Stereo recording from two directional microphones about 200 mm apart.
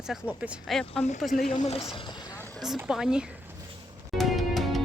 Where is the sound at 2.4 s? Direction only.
10° left (ahead or behind).